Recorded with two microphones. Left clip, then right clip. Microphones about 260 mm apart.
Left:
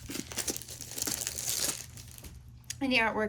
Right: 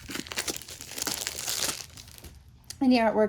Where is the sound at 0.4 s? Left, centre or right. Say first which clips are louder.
Right 3 dB; centre.